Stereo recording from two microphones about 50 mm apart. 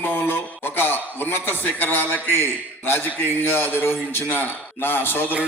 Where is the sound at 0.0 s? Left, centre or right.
Left.